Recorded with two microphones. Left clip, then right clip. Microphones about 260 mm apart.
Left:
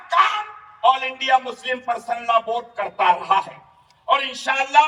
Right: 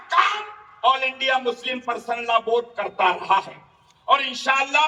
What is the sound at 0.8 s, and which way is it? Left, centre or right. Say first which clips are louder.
A man's voice: left 1 dB; centre.